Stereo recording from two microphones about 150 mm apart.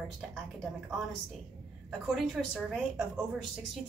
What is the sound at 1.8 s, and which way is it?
Speech, centre (ahead or behind).